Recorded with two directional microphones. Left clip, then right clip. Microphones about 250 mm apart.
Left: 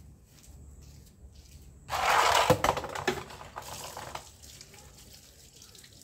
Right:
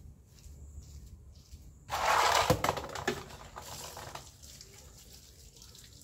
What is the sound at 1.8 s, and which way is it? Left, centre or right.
Typing, centre.